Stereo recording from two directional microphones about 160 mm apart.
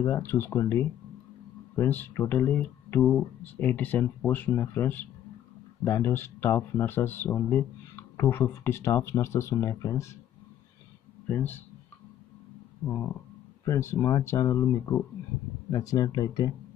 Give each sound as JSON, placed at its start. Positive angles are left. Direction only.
{"t": 0.0, "sound": "speech", "side_deg": 15}
{"t": 11.2, "sound": "speech", "side_deg": 10}
{"t": 13.7, "sound": "speech", "side_deg": 20}